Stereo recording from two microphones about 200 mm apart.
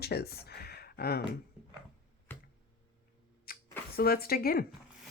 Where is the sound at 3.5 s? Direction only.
45° left (ahead or behind).